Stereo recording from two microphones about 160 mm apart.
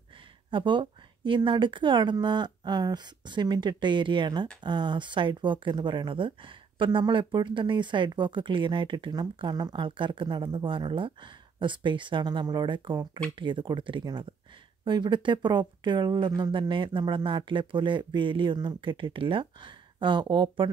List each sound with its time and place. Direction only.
0.5 s speech: 30° right (ahead or behind)